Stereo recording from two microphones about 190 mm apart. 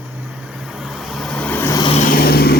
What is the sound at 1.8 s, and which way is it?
Vehicle, 30° left (ahead or behind).